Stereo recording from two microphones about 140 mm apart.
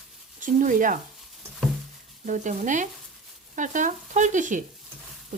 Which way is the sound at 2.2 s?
65° right (ahead or behind).